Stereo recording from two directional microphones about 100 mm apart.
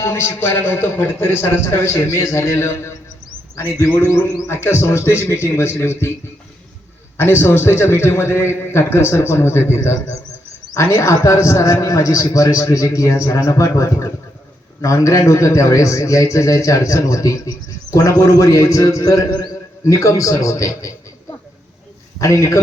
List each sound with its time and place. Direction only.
0.0 s a man's voice: 25° left (ahead or behind)
4.3 s a man's voice: 30° left (ahead or behind)
7.2 s a man's voice: 25° left (ahead or behind)